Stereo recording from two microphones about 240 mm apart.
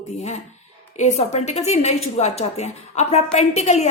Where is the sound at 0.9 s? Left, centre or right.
Left.